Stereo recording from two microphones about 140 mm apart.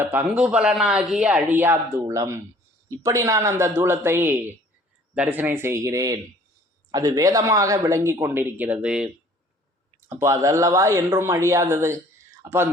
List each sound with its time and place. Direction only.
0.0 s a man's voice: 15° right (ahead or behind)
10.1 s speech: 20° right (ahead or behind)